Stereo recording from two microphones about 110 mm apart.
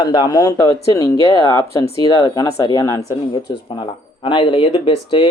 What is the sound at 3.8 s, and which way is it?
Speech, 50° left (ahead or behind).